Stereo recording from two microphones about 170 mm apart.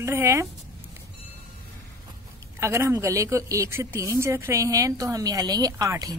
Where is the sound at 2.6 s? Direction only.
15° right (ahead or behind).